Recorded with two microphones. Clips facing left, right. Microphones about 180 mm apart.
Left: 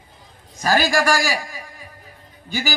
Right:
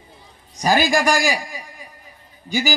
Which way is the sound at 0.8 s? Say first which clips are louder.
Right 1 dB; 15° right (ahead or behind).